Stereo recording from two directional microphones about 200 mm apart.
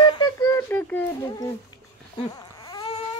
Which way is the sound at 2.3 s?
20° left (ahead or behind).